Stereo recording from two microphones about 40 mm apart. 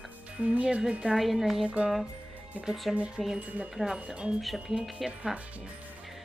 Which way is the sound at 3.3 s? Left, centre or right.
Right.